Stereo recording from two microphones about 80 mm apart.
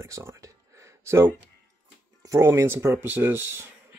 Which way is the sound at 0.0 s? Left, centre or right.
Right.